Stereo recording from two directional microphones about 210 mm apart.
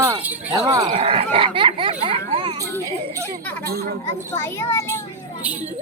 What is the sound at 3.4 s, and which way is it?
Speech, 10° left (ahead or behind).